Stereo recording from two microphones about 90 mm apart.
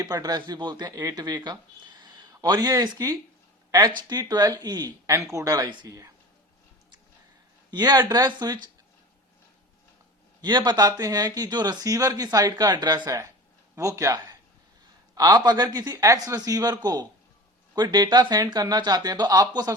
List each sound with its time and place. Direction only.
0.0 s speech: 45° right (ahead or behind)
5.1 s speech: 35° right (ahead or behind)
7.7 s speech: 50° right (ahead or behind)
10.4 s speech: 55° right (ahead or behind)